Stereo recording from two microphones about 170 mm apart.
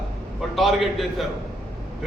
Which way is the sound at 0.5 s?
Centre (ahead or behind).